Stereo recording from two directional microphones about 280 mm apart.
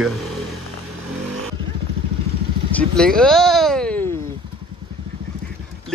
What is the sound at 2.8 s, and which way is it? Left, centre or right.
Speech, centre.